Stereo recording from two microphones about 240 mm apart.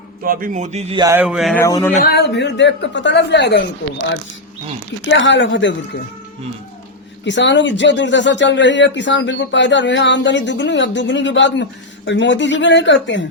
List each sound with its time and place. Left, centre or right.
0.2 s speech: right; by 1.6 s centre
1.6 s speech: centre
2.0 s speech: left
5.0 s speech: left
7.3 s speech: left